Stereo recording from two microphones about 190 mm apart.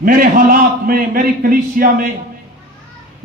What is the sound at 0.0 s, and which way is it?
Speech, 45° right (ahead or behind).